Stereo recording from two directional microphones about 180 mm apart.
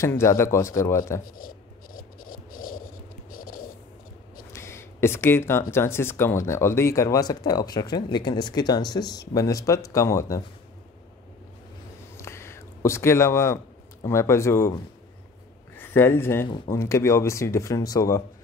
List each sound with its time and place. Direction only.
0.0 s speech: 15° left (ahead or behind)
1.2 s scratch: 50° left (ahead or behind)
3.3 s a sound: 50° left (ahead or behind)
4.5 s speech: 15° left (ahead or behind)
12.2 s a sound: 15° left (ahead or behind)
14.0 s speech: 15° left (ahead or behind)
15.9 s speech: 10° left (ahead or behind)